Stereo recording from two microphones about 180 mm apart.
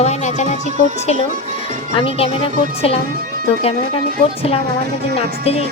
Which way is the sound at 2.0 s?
30° left (ahead or behind).